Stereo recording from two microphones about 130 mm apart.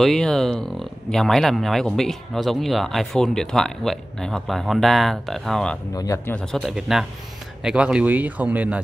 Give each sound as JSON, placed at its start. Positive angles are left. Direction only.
{"t": 0.0, "sound": "speech", "side_deg": 5}
{"t": 5.9, "sound": "speech", "side_deg": 25}
{"t": 6.4, "sound": "a man's voice", "side_deg": 0}